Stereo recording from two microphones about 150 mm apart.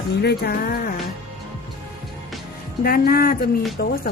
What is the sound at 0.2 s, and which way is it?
Music, 90° left.